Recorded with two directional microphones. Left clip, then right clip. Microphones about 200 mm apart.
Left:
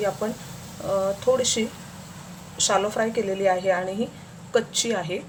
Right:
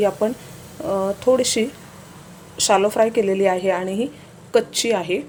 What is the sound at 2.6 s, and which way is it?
Speech, 35° right (ahead or behind).